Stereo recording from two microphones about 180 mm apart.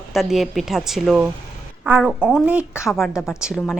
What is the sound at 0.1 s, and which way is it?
Speech, centre (ahead or behind).